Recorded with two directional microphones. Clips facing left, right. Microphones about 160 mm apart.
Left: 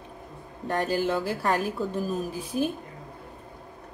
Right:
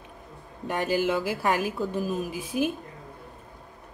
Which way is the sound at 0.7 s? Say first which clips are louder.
Even; 10° right (ahead or behind).